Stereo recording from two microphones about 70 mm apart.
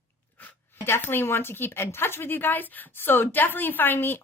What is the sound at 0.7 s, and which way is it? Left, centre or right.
A woman's voice, left.